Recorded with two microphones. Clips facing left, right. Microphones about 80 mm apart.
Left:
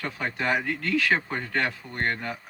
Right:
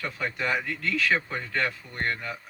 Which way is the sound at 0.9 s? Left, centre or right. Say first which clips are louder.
Left 1 dB; left.